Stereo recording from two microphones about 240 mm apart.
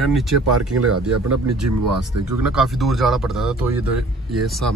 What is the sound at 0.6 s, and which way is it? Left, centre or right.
Speech, right.